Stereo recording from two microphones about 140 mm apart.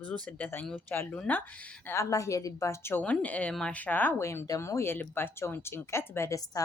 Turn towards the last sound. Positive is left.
turn(degrees=20)  # may be behind; listen again after turning